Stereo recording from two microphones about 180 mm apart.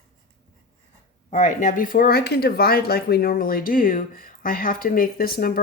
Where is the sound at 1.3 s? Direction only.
40° left (ahead or behind).